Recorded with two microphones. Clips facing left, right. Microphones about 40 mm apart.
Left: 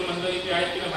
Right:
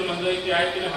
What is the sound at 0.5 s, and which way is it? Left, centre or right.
Speech, centre.